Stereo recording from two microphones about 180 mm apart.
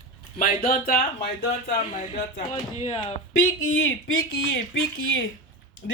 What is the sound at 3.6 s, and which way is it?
Speech, 90° left.